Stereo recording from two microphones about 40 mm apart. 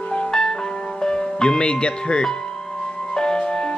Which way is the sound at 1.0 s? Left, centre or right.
Centre.